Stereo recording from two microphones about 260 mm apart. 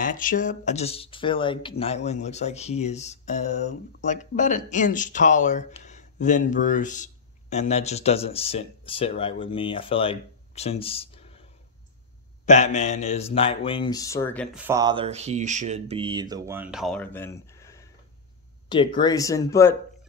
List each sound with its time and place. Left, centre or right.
0.0 s speech: left
12.4 s speech: left